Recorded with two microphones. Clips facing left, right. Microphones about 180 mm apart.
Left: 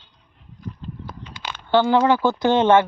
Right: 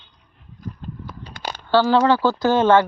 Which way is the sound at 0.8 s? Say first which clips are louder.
Even; 45° right (ahead or behind).